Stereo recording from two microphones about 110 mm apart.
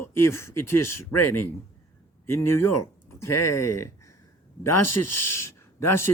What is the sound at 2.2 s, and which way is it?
Speech, 20° left (ahead or behind).